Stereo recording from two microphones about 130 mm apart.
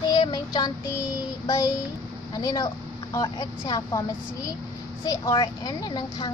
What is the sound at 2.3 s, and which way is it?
Speech, 30° left (ahead or behind).